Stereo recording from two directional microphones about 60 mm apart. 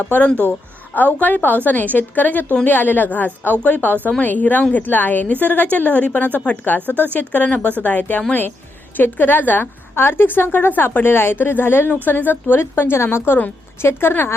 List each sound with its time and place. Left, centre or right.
0.0 s a woman's voice: left